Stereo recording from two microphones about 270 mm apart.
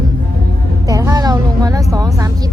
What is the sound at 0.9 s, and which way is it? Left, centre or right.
Music, centre.